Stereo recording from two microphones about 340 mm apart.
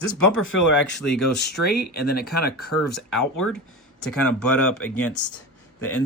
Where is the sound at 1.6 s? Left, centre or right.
Left.